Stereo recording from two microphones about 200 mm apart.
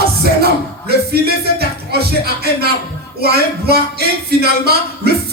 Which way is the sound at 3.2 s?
50° right (ahead or behind).